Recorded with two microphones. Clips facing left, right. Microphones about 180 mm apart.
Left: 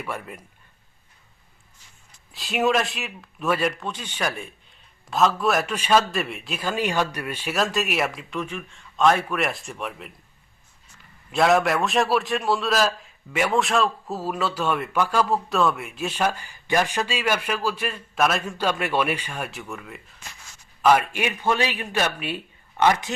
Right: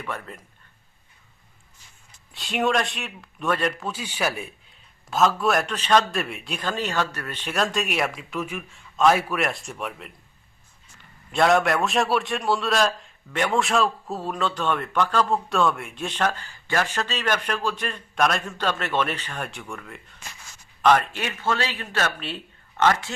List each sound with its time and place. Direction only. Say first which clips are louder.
0.0 s a man's voice: left 1 dB; 10° left (ahead or behind)
2.3 s a man's voice: left 1 dB; centre (ahead or behind)
11.3 s a man's voice: even; centre (ahead or behind)